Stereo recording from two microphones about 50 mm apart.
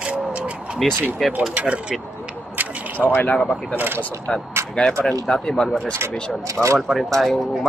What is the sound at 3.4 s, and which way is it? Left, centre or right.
Speech, centre.